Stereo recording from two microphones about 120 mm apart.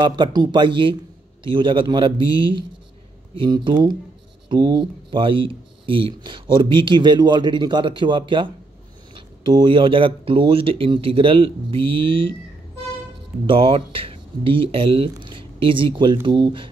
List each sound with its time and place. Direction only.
0.0 s speech: 35° right (ahead or behind)
13.5 s speech: 45° right (ahead or behind)